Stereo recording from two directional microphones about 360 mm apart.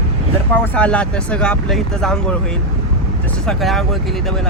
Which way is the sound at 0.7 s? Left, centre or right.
Centre.